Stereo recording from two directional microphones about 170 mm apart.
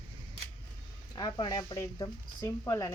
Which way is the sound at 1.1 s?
25° left (ahead or behind).